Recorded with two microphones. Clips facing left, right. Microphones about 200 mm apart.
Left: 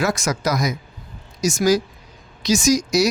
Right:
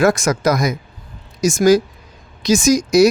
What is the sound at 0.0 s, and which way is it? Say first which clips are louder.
Speech: right 7 dB; 50° right (ahead or behind).